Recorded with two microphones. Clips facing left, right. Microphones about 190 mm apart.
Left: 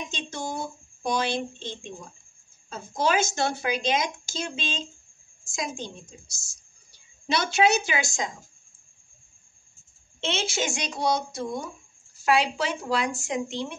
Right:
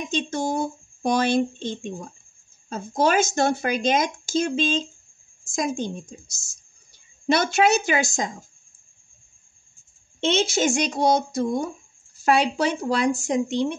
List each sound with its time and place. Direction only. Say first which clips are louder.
0.1 s speech: right 8 dB; 45° right (ahead or behind)
10.2 s speech: right 7 dB; 40° right (ahead or behind)